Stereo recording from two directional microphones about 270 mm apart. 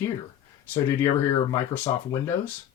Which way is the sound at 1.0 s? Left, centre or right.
Centre.